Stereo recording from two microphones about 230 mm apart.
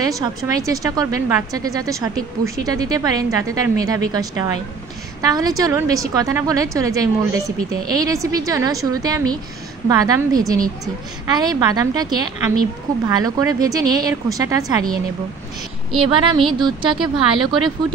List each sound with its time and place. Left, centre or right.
0.0 s a woman's voice: centre
16.0 s speech: right